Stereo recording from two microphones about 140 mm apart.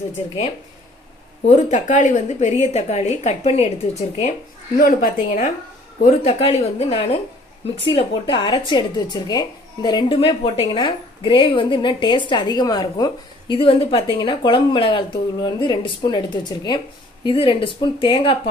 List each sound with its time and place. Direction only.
1.5 s a woman's voice: 60° left (ahead or behind)
4.7 s a woman's voice: 90° left; by 5.5 s 75° left (ahead or behind)
6.0 s a woman's voice: 50° left (ahead or behind)